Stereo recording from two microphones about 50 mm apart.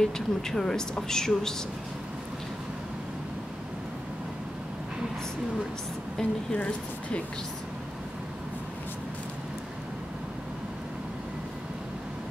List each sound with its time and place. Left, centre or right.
0.0 s speech: centre
6.2 s speech: centre
6.5 s speech: left